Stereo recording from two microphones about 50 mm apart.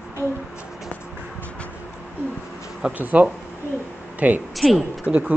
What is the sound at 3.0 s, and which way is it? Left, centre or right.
Speech, right.